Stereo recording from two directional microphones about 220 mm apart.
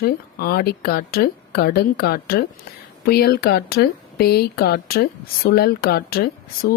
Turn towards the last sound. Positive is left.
turn(degrees=45)  # may be behind; listen again after turning